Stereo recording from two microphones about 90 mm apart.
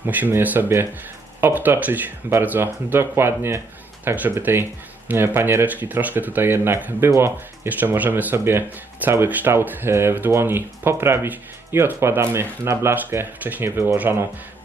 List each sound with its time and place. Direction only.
0.0 s speech: 20° right (ahead or behind)